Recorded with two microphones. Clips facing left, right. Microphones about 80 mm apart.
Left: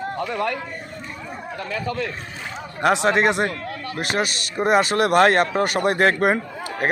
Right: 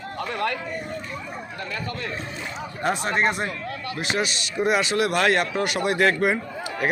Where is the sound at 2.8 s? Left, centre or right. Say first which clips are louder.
Left 5 dB; left.